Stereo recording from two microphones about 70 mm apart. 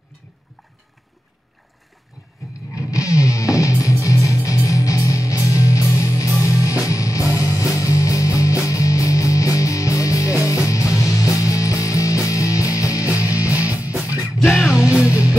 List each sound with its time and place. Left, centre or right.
2.7 s music: left
13.3 s music: right
14.2 s music: centre